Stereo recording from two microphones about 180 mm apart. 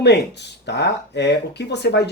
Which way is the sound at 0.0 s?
70° left (ahead or behind).